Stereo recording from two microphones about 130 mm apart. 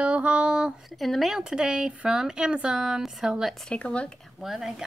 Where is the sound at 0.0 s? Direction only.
10° right (ahead or behind).